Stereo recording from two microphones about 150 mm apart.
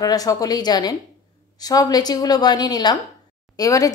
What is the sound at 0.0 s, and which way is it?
A woman's voice, 25° left (ahead or behind).